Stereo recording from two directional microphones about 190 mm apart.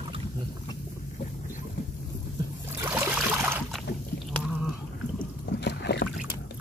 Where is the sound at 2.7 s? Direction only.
10° right (ahead or behind).